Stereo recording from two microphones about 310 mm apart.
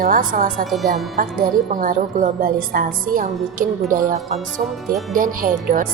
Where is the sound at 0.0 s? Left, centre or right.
Right.